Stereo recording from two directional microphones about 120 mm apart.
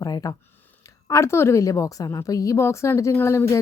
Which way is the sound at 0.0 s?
30° left (ahead or behind).